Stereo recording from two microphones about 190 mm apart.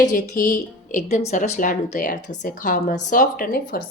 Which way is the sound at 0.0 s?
40° left (ahead or behind).